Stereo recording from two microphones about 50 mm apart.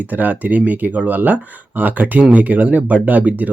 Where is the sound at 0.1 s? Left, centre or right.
Right.